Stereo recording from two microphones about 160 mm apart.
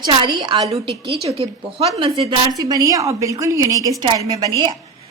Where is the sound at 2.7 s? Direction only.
20° right (ahead or behind).